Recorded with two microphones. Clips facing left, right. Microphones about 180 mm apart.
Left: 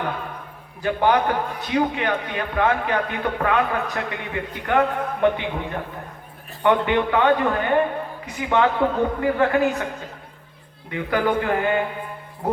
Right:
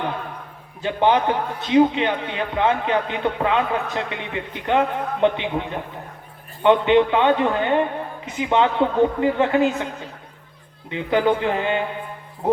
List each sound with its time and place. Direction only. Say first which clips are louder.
0.8 s a man's voice: right 1 dB; 20° right (ahead or behind)
6.6 s a man's voice: right 4 dB; 20° right (ahead or behind)